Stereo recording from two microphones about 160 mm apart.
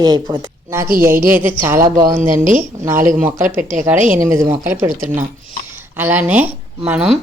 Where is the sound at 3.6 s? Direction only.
55° right (ahead or behind).